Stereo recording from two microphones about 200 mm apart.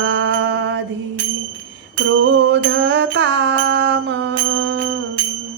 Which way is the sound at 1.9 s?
65° right (ahead or behind).